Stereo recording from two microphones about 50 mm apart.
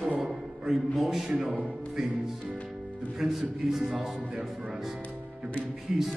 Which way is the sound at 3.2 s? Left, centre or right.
Centre.